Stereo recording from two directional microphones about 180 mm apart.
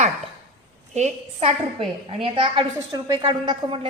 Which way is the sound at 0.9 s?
35° right (ahead or behind).